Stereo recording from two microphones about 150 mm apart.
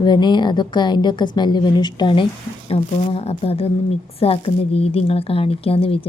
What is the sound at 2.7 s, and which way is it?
A woman's voice, 45° left (ahead or behind).